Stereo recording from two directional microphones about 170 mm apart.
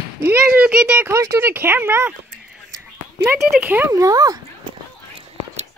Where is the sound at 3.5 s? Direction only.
10° right (ahead or behind).